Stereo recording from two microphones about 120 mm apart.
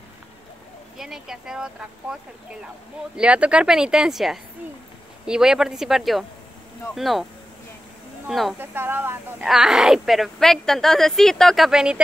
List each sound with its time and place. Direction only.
0.9 s a woman's voice: 5° right (ahead or behind)
3.2 s a woman's voice: 10° right (ahead or behind)
8.3 s a woman's voice: centre (ahead or behind)
8.5 s speech: 15° right (ahead or behind)
9.4 s a woman's voice: 5° right (ahead or behind)